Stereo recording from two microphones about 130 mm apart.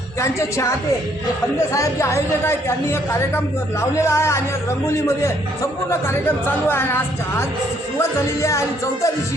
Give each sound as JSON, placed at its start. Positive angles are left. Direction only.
{"t": 0.2, "sound": "a woman's voice", "side_deg": 25}
{"t": 1.7, "sound": "a woman's voice", "side_deg": 20}